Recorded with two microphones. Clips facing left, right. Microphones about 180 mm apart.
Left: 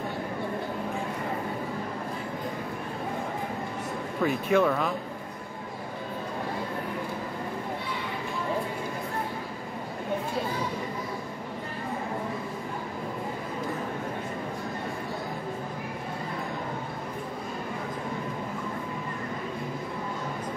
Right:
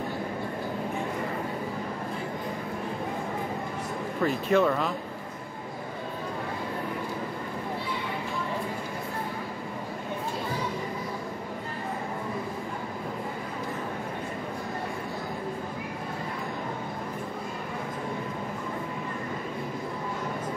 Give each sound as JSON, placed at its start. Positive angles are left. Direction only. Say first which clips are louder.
{"t": 4.2, "sound": "speech", "louder": "even", "side_deg": 0}